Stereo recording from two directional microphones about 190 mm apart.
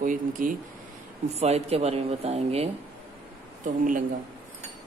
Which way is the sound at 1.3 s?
35° right (ahead or behind).